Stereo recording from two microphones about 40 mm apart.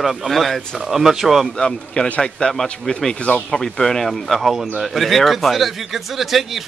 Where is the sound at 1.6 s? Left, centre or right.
Left.